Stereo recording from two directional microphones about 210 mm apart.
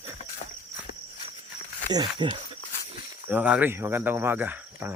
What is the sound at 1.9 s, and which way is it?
Speech, 20° right (ahead or behind).